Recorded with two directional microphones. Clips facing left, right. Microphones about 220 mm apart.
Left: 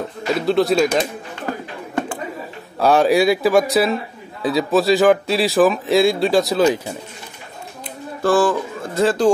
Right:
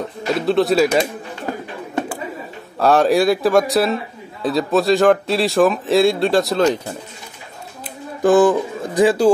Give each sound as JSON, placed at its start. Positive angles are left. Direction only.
{"t": 0.3, "sound": "a man's voice", "side_deg": 0}
{"t": 2.8, "sound": "a man's voice", "side_deg": 0}
{"t": 8.2, "sound": "speech", "side_deg": -20}